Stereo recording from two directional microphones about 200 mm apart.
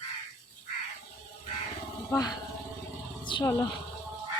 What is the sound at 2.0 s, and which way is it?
Speech, 20° left (ahead or behind).